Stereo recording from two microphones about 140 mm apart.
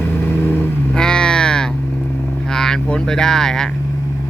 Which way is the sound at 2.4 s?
5° left (ahead or behind).